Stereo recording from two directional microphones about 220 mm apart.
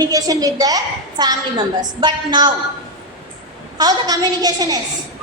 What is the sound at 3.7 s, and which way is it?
A woman's voice, 15° right (ahead or behind).